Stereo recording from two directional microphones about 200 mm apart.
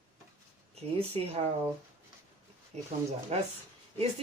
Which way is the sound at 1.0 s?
30° right (ahead or behind).